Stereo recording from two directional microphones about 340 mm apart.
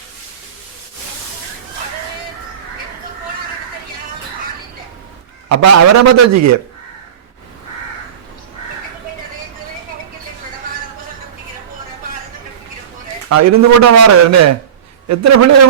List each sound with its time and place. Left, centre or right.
5.5 s a man's voice: right
13.2 s a man's voice: right